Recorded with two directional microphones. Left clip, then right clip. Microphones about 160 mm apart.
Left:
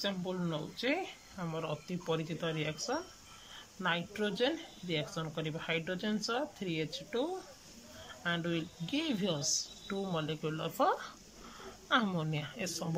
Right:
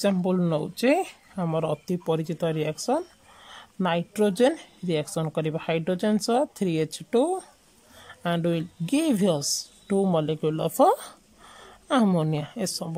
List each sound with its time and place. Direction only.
0.0 s speech: 60° right (ahead or behind); by 12.9 s 35° right (ahead or behind)